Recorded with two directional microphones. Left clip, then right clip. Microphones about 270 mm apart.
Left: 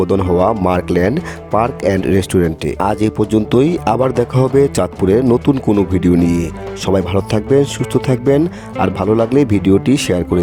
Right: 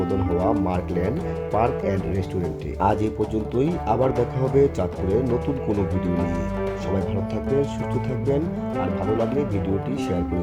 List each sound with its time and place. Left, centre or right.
0.1 s speech: left